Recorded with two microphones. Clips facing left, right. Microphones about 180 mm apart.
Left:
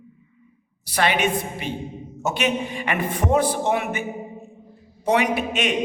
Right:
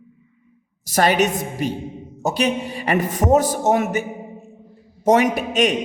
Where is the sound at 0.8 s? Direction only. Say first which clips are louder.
Right 4 dB; 40° right (ahead or behind).